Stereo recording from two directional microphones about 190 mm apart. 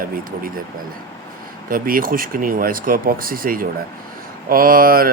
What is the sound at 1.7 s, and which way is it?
Speech, 50° right (ahead or behind).